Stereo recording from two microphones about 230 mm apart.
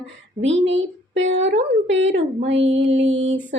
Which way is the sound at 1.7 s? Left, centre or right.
Right.